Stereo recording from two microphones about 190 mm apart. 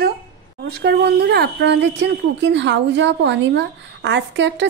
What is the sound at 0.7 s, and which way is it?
Speech, 55° right (ahead or behind).